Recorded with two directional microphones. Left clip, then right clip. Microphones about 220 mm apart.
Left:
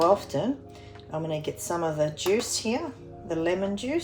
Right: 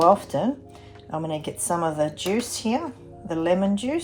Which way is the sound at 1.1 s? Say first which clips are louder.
Right 2 dB; 30° right (ahead or behind).